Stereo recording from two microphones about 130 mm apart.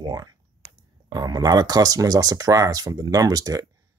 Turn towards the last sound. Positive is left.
turn(degrees=-30)  # may be behind; listen again after turning